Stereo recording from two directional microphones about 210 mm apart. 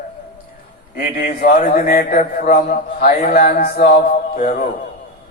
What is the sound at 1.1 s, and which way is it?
A man's voice, 40° left (ahead or behind).